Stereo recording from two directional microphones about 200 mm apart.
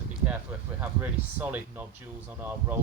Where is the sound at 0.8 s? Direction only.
10° right (ahead or behind).